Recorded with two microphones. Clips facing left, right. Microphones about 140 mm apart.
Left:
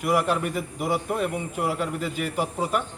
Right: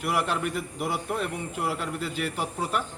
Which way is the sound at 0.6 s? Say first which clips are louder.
Left 4 dB; 10° left (ahead or behind).